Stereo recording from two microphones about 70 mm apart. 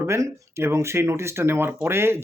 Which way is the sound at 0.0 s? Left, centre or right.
Right.